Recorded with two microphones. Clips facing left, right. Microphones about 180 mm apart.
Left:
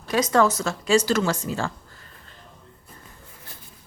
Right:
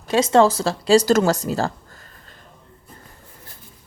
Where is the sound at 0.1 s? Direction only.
25° right (ahead or behind).